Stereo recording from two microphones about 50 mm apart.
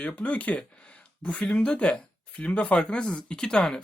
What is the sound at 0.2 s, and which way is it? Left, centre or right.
Speech, left.